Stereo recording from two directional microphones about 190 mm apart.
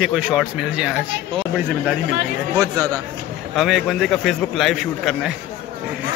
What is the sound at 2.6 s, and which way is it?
Speech, 20° right (ahead or behind).